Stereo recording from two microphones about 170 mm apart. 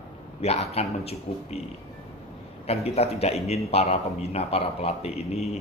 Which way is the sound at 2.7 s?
40° left (ahead or behind).